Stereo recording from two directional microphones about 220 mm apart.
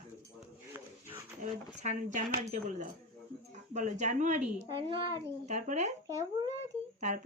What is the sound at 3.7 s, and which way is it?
Speech, 35° right (ahead or behind).